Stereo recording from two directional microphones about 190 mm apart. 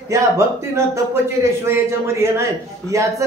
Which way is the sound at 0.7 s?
15° right (ahead or behind).